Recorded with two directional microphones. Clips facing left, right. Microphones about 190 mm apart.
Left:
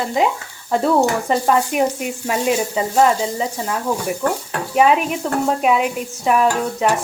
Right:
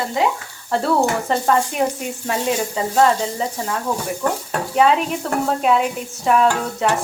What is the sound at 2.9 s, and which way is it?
Speech, 10° left (ahead or behind).